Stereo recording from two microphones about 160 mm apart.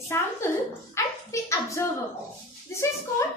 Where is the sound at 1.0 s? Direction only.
15° left (ahead or behind).